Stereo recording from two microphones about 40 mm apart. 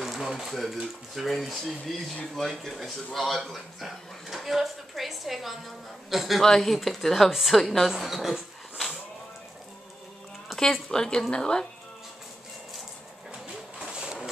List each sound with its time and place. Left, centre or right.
0.0 s speech: centre
10.6 s speech: centre
13.7 s a sound: centre